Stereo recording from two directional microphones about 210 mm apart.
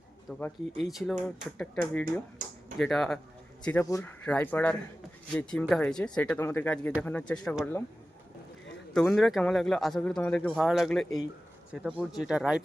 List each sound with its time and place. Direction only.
0.3 s speech: 5° left (ahead or behind)
2.4 s a sound: 40° right (ahead or behind)
2.7 s speech: centre (ahead or behind)
8.9 s speech: centre (ahead or behind)